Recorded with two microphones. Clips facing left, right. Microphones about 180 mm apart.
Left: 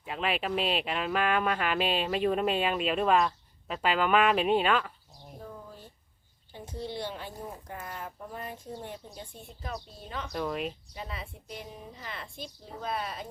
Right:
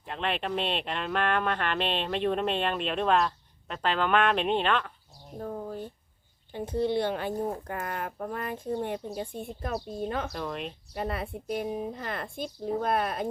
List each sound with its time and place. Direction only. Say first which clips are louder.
0.0 s speech: even; 5° left (ahead or behind)
5.4 s a sound: right 10 dB; 55° right (ahead or behind)
6.5 s a woman's voice: right 10 dB; 60° right (ahead or behind)
10.3 s speech: left 2 dB; 5° left (ahead or behind)
10.9 s a woman's voice: right 9 dB; 55° right (ahead or behind)